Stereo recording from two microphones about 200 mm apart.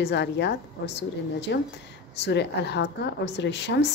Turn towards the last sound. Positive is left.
turn(degrees=60)  # may be behind; listen again after turning